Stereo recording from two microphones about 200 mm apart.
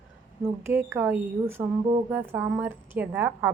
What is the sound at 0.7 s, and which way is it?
A woman's voice, 10° right (ahead or behind).